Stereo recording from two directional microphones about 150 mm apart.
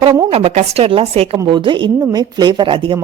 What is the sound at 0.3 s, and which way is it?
A woman's voice, 40° right (ahead or behind).